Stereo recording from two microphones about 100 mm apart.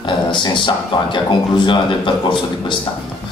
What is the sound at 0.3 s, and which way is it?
A man's voice, 50° left (ahead or behind).